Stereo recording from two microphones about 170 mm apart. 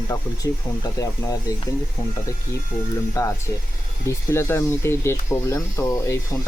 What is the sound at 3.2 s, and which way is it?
Speech, 20° left (ahead or behind).